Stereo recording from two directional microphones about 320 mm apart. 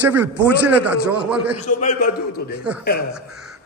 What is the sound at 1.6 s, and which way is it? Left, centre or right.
Speech, left.